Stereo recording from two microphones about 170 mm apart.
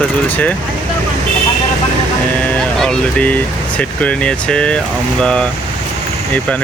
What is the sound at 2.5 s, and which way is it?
Speech, 5° left (ahead or behind).